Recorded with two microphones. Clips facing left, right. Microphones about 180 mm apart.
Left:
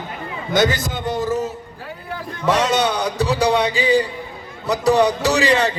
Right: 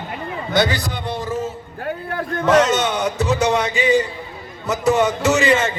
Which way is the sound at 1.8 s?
60° right (ahead or behind).